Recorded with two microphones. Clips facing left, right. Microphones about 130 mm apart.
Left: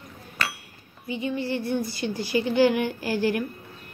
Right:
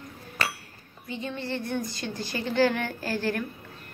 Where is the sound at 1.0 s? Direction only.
10° left (ahead or behind).